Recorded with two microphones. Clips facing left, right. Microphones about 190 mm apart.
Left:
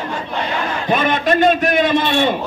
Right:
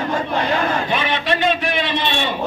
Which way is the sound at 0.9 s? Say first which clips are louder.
Left 4 dB; 45° left (ahead or behind).